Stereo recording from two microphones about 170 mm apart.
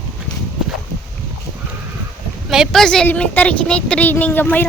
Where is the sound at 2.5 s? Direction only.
Centre (ahead or behind).